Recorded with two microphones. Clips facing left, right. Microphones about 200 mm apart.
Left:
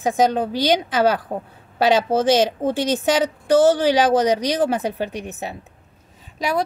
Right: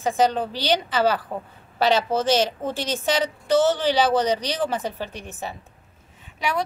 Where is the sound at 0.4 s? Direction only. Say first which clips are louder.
Left 4 dB; 15° left (ahead or behind).